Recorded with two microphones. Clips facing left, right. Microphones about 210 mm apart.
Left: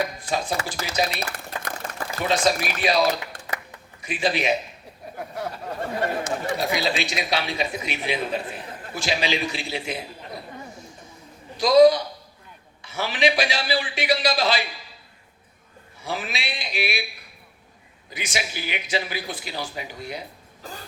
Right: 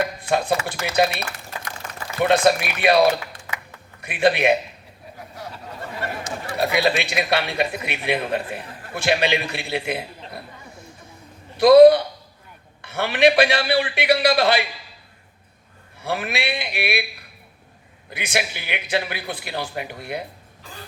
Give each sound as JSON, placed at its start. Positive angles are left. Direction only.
{"t": 0.2, "sound": "a man's voice", "side_deg": -60}
{"t": 1.2, "sound": "a sound", "side_deg": 40}
{"t": 2.2, "sound": "a man's voice", "side_deg": -60}
{"t": 6.6, "sound": "a man's voice", "side_deg": -60}
{"t": 11.5, "sound": "a man's voice", "side_deg": -60}
{"t": 16.0, "sound": "a man's voice", "side_deg": -60}
{"t": 18.1, "sound": "a man's voice", "side_deg": -60}